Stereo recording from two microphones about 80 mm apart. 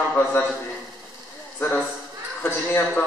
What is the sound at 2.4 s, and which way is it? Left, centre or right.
Speech, left.